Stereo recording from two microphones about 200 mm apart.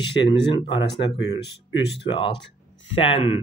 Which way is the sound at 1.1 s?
60° left (ahead or behind).